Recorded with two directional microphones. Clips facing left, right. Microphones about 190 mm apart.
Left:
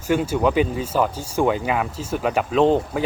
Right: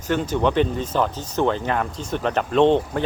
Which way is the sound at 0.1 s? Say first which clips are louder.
Left 1 dB; 10° left (ahead or behind).